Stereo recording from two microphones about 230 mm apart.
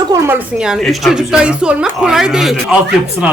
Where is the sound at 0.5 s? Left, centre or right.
Centre.